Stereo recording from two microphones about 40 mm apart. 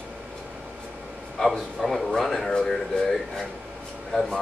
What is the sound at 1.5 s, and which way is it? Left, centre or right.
A man's voice, centre.